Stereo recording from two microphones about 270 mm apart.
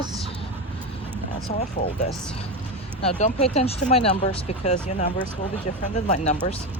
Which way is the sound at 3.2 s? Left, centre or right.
Left.